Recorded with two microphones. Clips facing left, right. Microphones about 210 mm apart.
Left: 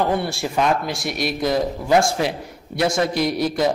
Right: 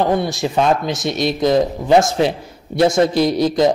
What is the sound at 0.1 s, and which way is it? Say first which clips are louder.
Speech: right 4 dB; 15° right (ahead or behind).